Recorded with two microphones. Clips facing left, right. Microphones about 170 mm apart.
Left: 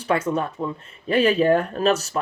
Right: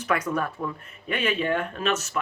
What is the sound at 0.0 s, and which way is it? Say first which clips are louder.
Speech: left 4 dB; 25° left (ahead or behind).